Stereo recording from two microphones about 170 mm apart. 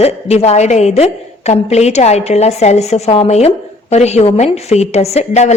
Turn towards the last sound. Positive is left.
turn(degrees=40)  # may be behind; listen again after turning